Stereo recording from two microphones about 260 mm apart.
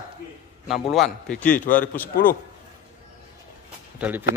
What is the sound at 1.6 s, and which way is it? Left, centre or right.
Speech, left.